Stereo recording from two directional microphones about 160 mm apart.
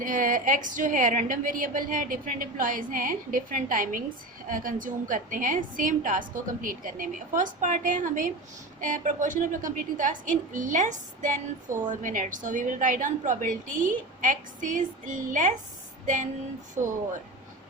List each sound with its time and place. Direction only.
0.0 s a woman's voice: 55° right (ahead or behind)
16.8 s speech: 15° right (ahead or behind)